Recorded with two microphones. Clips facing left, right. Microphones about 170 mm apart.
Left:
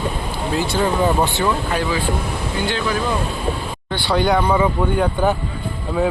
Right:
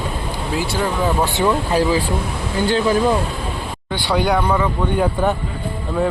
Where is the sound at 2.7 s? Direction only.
35° right (ahead or behind).